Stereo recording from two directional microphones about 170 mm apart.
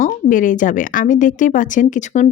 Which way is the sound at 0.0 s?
50° left (ahead or behind).